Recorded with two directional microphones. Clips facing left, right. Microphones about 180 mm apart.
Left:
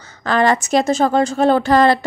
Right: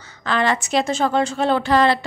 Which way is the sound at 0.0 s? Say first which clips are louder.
Left 5 dB; 45° left (ahead or behind).